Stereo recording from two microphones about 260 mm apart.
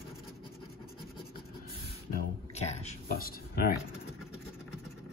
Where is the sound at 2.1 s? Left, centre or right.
Left.